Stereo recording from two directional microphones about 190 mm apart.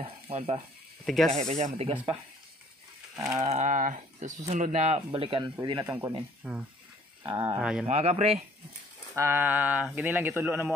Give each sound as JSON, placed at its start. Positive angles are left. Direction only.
{"t": 0.0, "sound": "speech", "side_deg": -30}
{"t": 1.0, "sound": "speech", "side_deg": 0}
{"t": 1.4, "sound": "speech", "side_deg": -35}
{"t": 3.3, "sound": "speech", "side_deg": -35}
{"t": 5.9, "sound": "speech", "side_deg": -10}
{"t": 7.2, "sound": "speech", "side_deg": -25}
{"t": 7.5, "sound": "speech", "side_deg": -5}
{"t": 7.8, "sound": "speech", "side_deg": -35}
{"t": 9.1, "sound": "speech", "side_deg": -15}